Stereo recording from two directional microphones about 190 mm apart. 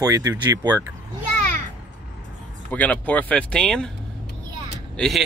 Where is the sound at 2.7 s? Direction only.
10° left (ahead or behind).